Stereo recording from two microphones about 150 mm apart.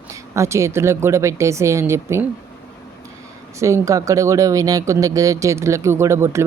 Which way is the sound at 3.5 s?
20° right (ahead or behind).